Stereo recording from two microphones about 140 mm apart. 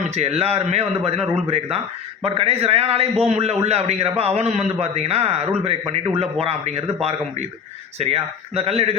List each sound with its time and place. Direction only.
0.2 s a man's voice: 50° right (ahead or behind)